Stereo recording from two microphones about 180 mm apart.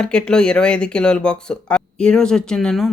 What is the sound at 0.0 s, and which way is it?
Speech, 5° left (ahead or behind).